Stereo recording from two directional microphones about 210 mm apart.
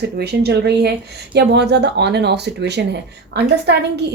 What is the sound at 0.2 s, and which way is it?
Speech, 50° right (ahead or behind).